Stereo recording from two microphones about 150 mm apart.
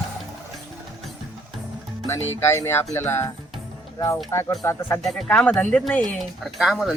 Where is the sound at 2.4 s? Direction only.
15° left (ahead or behind).